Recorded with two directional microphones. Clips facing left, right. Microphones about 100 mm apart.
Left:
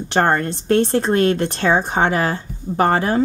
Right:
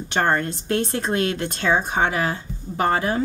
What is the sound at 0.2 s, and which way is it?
A woman's voice, 35° left (ahead or behind).